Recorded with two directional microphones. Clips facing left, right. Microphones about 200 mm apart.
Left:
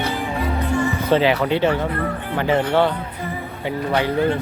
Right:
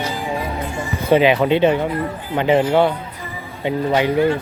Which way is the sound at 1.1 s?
15° right (ahead or behind).